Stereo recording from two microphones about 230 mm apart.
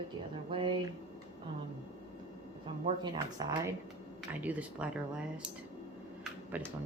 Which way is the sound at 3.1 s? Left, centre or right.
Centre.